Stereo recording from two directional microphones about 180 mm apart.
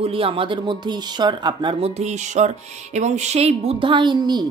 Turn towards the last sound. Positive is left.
turn(degrees=-25)  # may be behind; listen again after turning